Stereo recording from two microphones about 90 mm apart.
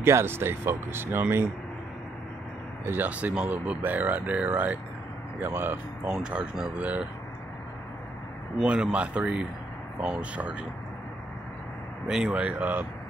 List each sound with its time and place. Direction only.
0.0 s speech: 25° right (ahead or behind)
2.9 s speech: 20° right (ahead or behind)
6.0 s speech: 10° right (ahead or behind)
8.6 s speech: 10° right (ahead or behind)
12.1 s speech: 10° right (ahead or behind)